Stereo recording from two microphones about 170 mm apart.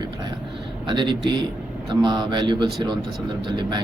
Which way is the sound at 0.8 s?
25° right (ahead or behind).